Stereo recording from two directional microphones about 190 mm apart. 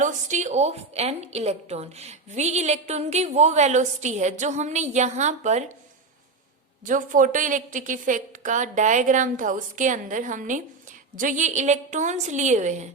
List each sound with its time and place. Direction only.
0.0 s a woman's voice: 40° right (ahead or behind)
6.8 s a woman's voice: 45° right (ahead or behind)